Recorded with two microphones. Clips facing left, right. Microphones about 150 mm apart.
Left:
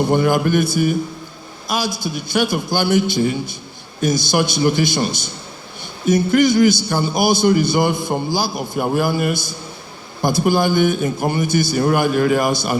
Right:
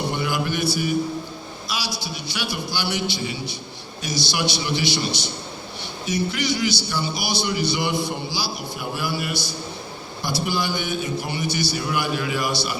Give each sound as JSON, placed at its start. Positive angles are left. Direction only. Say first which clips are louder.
{"t": 0.1, "sound": "a man's voice", "louder": "left 9 dB", "side_deg": 50}